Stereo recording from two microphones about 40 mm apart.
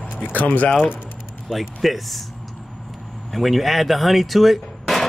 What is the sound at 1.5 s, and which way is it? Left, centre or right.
Speech, centre.